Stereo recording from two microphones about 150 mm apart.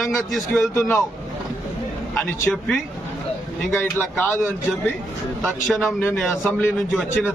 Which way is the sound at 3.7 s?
10° left (ahead or behind).